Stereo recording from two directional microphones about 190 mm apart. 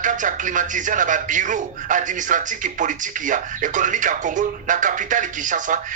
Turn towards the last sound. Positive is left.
turn(degrees=-40)  # may be behind; listen again after turning